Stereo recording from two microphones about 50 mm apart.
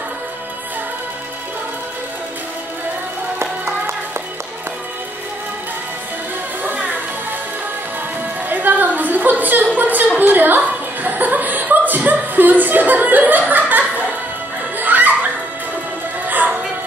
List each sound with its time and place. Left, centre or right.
6.6 s music: right
8.5 s a sound: right
13.5 s chuckle: right
14.8 s music: right
16.3 s music: right